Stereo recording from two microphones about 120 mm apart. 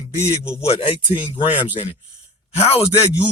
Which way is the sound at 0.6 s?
60° left (ahead or behind).